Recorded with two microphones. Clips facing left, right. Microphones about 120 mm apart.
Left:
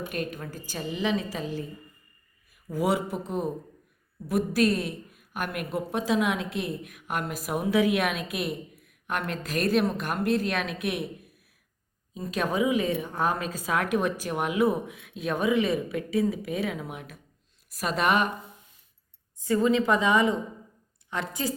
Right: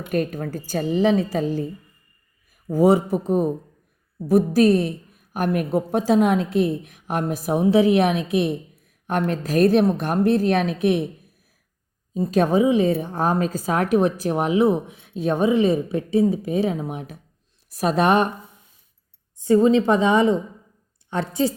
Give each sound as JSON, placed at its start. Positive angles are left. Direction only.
{"t": 0.1, "sound": "a woman's voice", "side_deg": -45}
{"t": 12.1, "sound": "a woman's voice", "side_deg": -35}
{"t": 19.4, "sound": "a woman's voice", "side_deg": -30}